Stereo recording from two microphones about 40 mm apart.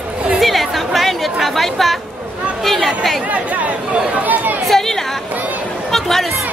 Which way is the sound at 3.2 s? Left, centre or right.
Right.